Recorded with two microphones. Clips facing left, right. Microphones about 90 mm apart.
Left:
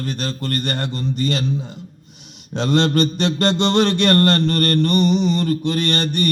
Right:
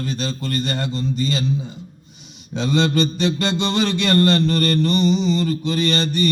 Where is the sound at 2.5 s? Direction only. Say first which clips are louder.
Left 2 dB; 65° left (ahead or behind).